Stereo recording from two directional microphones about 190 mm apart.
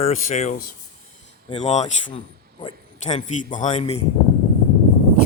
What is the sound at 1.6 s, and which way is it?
Speech, 35° left (ahead or behind).